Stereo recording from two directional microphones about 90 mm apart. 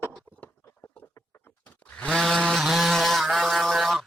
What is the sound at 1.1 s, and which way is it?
Duck, 25° left (ahead or behind).